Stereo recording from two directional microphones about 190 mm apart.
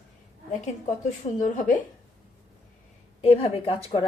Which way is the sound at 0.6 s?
40° left (ahead or behind).